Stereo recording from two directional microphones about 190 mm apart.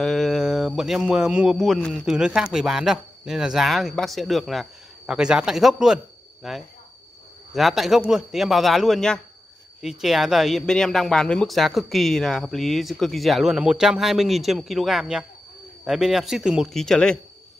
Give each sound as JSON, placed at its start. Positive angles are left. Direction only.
{"t": 0.0, "sound": "speech", "side_deg": 0}